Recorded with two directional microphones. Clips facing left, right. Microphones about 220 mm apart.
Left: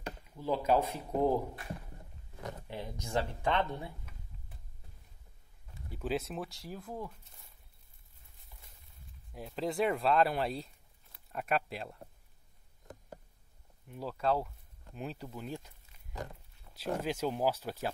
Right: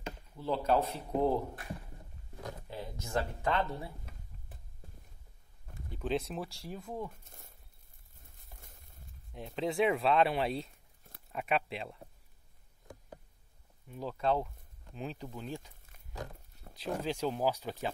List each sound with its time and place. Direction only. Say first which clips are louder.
0.4 s speech: left 1 dB; 10° left (ahead or behind)
2.7 s speech: left 1 dB; 15° left (ahead or behind)
5.9 s speech: right 1 dB; 5° left (ahead or behind)
7.2 s a sound: right 5 dB; 50° right (ahead or behind)
8.5 s a sound: right 4 dB; 50° right (ahead or behind)
9.3 s speech: right 1 dB; centre (ahead or behind)
13.8 s speech: even; 5° left (ahead or behind)
16.8 s speech: even; 5° left (ahead or behind)